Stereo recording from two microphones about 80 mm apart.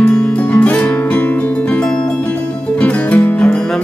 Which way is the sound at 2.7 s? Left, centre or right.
Centre.